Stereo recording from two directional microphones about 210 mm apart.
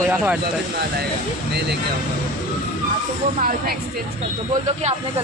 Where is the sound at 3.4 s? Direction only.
40° right (ahead or behind).